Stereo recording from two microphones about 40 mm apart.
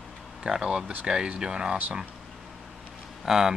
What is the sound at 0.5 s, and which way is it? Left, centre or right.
Speech, centre.